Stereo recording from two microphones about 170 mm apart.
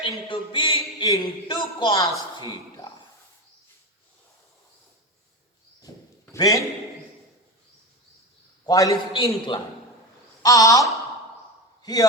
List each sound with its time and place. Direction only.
0.3 s a man's voice: 30° left (ahead or behind)
2.4 s a sound: 25° left (ahead or behind)
6.3 s a man's voice: 20° left (ahead or behind)
8.6 s a man's voice: 20° left (ahead or behind)